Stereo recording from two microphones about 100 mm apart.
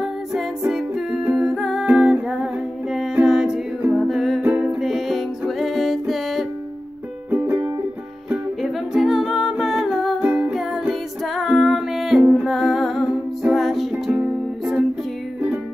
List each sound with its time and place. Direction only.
0.0 s music: 5° right (ahead or behind)
7.2 s music: 20° right (ahead or behind)
8.9 s music: centre (ahead or behind)
10.2 s music: 15° right (ahead or behind)
10.5 s music: centre (ahead or behind)